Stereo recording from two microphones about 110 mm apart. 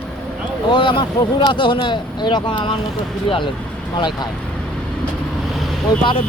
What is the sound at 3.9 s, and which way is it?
Speech, 45° left (ahead or behind).